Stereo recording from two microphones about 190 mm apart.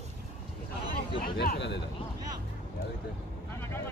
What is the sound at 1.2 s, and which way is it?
Speech, 55° left (ahead or behind).